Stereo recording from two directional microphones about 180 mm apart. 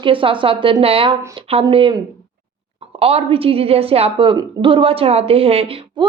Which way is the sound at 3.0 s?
35° right (ahead or behind).